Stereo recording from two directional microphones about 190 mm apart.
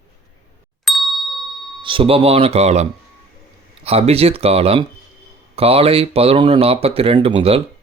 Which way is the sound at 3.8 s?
30° right (ahead or behind).